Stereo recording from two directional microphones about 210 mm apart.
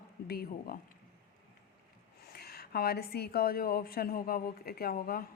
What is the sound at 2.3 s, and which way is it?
A woman's voice, 45° left (ahead or behind).